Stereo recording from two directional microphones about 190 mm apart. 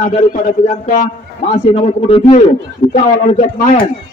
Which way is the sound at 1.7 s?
30° left (ahead or behind).